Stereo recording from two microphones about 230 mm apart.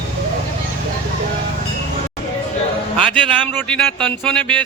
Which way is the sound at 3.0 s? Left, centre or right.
Centre.